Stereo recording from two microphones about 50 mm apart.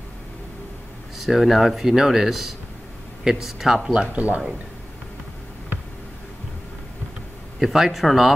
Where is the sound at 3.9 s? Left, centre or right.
Right.